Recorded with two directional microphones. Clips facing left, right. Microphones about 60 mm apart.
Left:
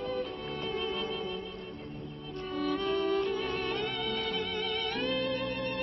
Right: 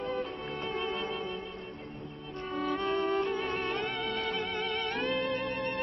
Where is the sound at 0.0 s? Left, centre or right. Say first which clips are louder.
Even; right.